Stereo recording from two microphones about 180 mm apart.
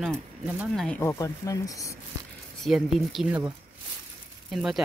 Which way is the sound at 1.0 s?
15° left (ahead or behind).